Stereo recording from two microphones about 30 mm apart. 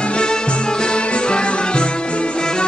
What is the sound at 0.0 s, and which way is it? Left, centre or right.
Music, left.